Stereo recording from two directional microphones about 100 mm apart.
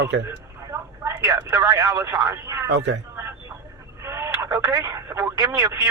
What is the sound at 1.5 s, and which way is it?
Speech, 40° right (ahead or behind).